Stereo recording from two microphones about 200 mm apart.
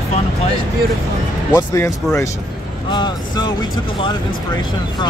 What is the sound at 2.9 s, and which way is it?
Speech, 20° left (ahead or behind).